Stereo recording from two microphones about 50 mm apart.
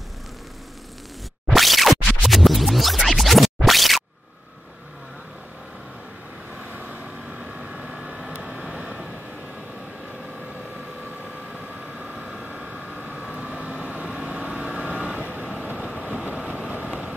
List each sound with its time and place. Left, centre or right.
1.5 s scratch: centre
6.6 s vehicle: right
11.5 s a sound: right
12.5 s vehicle: centre
15.8 s vehicle: centre
16.7 s vehicle: right